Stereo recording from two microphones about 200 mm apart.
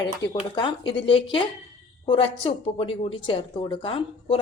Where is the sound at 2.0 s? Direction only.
25° left (ahead or behind).